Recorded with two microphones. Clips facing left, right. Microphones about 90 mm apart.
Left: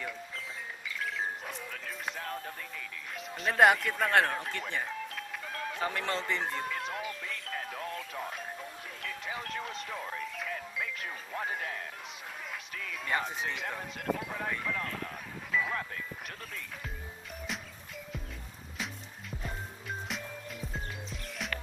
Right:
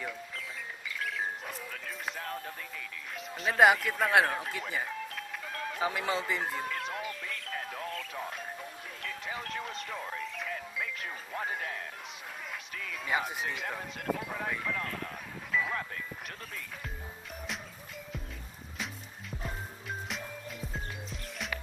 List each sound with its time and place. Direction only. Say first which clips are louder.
1.4 s music: even; centre (ahead or behind)
12.7 s speech: right 1 dB; centre (ahead or behind)
19.4 s music: right 1 dB; centre (ahead or behind)